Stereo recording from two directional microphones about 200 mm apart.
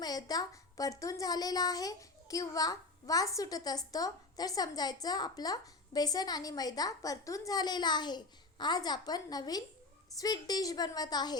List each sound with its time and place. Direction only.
0.0 s a woman's voice: 20° left (ahead or behind)